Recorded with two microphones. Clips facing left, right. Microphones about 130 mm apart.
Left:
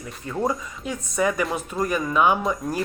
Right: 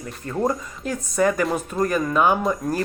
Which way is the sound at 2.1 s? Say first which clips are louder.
Left 1 dB; 40° right (ahead or behind).